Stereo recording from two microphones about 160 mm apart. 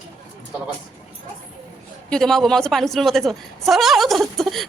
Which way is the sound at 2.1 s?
Centre (ahead or behind).